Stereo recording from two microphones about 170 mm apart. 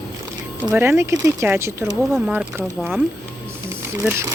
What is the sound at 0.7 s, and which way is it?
Speech, 15° right (ahead or behind).